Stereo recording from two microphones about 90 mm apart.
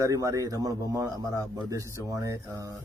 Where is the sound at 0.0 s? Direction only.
40° right (ahead or behind).